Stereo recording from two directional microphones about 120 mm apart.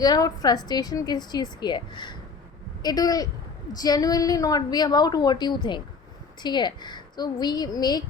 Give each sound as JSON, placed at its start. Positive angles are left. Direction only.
{"t": 0.0, "sound": "a woman's voice", "side_deg": 35}